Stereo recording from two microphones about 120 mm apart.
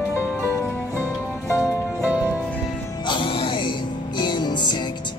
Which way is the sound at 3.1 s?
45° left (ahead or behind).